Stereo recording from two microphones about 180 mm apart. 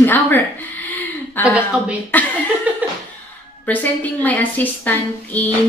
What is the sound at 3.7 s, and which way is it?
A woman's voice, 10° left (ahead or behind).